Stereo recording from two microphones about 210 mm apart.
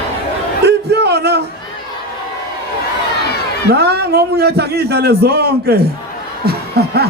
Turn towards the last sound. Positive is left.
turn(degrees=-50)  # may be behind; listen again after turning